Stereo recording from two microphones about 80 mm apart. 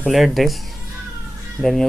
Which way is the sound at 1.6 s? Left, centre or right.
Centre.